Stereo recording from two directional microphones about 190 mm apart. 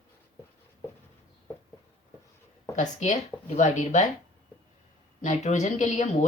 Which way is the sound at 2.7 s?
40° left (ahead or behind).